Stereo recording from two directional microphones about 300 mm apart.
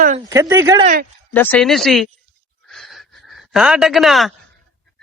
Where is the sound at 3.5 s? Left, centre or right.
Centre.